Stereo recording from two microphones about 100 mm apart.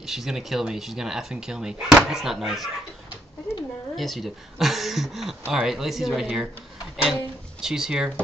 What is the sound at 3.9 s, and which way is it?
Speech, centre (ahead or behind).